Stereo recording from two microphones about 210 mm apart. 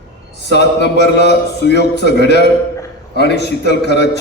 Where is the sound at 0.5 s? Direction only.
55° left (ahead or behind).